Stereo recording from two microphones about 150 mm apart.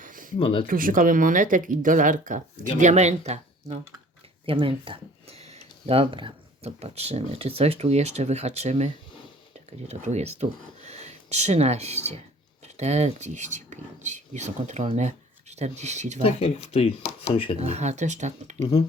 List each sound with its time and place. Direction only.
0.0 s a sound: 65° right (ahead or behind)
0.3 s speech: 35° left (ahead or behind)
0.7 s speech: 70° right (ahead or behind)
2.8 s speech: 50° right (ahead or behind)
4.4 s speech: 35° right (ahead or behind)
16.2 s speech: 40° left (ahead or behind)
17.6 s speech: 45° right (ahead or behind)